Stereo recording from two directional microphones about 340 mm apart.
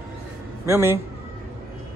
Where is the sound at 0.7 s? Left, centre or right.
Centre.